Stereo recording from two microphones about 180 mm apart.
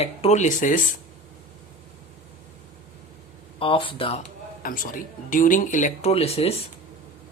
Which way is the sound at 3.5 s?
30° left (ahead or behind).